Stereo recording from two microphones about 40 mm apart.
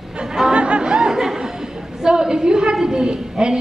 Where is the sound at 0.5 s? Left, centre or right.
Right.